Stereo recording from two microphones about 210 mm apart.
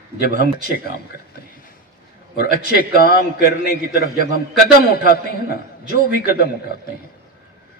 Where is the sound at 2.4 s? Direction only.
45° left (ahead or behind).